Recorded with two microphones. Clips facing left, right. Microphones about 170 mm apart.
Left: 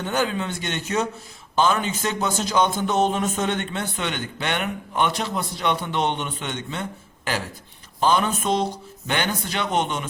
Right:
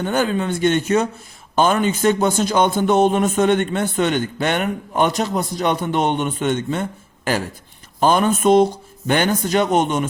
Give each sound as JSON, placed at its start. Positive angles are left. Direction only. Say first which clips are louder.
{"t": 0.0, "sound": "speech", "louder": "right 5 dB", "side_deg": -50}
{"t": 8.0, "sound": "speech", "louder": "right 6 dB", "side_deg": -50}